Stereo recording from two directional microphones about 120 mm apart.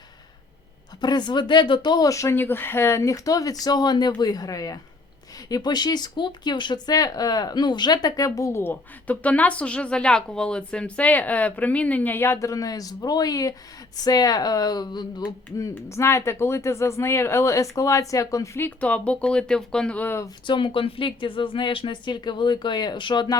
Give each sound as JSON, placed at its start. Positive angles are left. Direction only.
{"t": 1.0, "sound": "speech", "side_deg": 35}
{"t": 20.5, "sound": "speech", "side_deg": 45}